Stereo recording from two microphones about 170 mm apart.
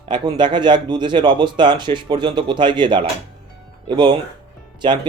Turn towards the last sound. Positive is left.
turn(degrees=-25)  # may be behind; listen again after turning